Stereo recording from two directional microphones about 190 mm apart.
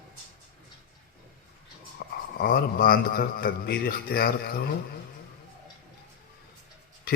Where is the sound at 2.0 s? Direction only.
45° left (ahead or behind).